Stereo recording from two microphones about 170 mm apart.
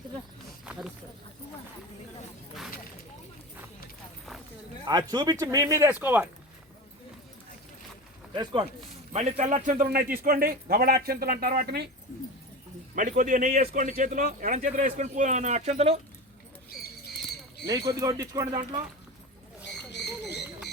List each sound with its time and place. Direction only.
0.6 s a sound: 5° right (ahead or behind)
4.9 s speech: 25° right (ahead or behind)
8.4 s speech: 30° right (ahead or behind)
9.1 s a man's voice: 45° right (ahead or behind); by 11.9 s 70° right (ahead or behind)
13.0 s a man's voice: 50° right (ahead or behind)
17.7 s speech: 20° right (ahead or behind)
19.9 s a sound: 90° left